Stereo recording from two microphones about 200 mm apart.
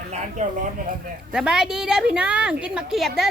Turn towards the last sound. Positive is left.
turn(degrees=-5)  # may be behind; listen again after turning